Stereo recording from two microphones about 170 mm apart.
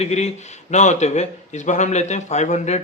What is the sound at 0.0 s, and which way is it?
A man's voice, 40° left (ahead or behind).